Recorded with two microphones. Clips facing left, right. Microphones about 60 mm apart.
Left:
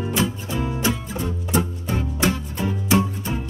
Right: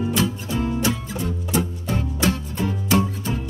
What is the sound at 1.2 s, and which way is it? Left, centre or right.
Music, left.